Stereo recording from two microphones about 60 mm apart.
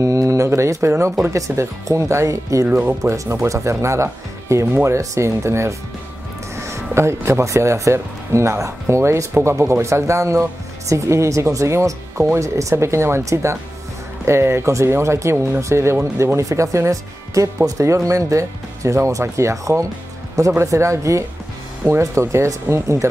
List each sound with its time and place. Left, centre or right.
0.0 s a sound: right
0.5 s speech: right
2.7 s speech: right
3.0 s speech: right
22.2 s speech: right